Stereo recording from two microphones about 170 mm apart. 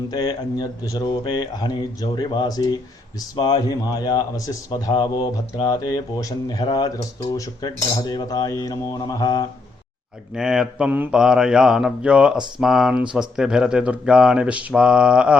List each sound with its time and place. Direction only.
0.1 s speech: 25° left (ahead or behind)
10.3 s speech: 5° right (ahead or behind)